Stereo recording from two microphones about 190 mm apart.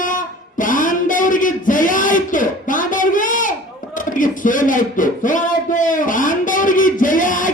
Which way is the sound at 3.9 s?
45° left (ahead or behind).